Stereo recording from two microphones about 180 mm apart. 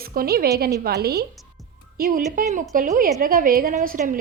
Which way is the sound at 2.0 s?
50° right (ahead or behind).